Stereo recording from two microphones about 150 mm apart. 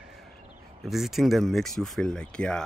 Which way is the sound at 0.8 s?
Centre (ahead or behind).